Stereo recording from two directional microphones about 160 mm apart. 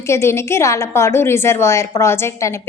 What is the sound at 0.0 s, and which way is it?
A woman's voice, 15° left (ahead or behind).